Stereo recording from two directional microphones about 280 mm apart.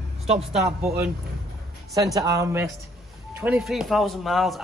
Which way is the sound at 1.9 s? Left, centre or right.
Centre.